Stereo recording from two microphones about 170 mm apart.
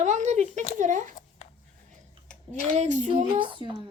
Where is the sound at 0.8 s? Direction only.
45° right (ahead or behind).